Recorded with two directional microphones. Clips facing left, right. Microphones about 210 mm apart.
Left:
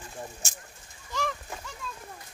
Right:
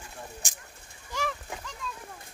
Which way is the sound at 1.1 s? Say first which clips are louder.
Left 1 dB; 10° right (ahead or behind).